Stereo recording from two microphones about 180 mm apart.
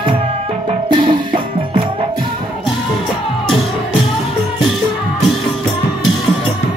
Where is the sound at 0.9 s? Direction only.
25° right (ahead or behind).